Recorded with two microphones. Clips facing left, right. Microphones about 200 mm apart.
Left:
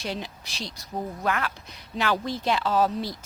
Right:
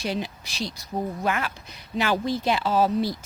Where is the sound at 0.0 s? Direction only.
5° right (ahead or behind).